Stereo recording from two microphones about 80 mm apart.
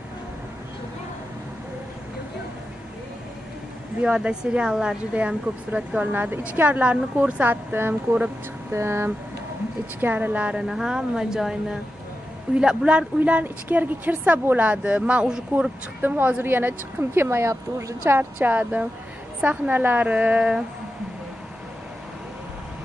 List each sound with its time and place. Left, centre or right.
4.0 s speech: centre
10.6 s speech: centre
16.0 s speech: right